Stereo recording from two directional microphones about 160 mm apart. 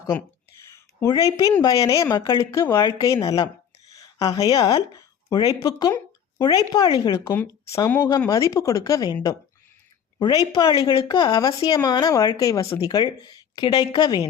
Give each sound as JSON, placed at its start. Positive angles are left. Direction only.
{"t": 0.7, "sound": "speech", "side_deg": 20}
{"t": 10.2, "sound": "speech", "side_deg": 30}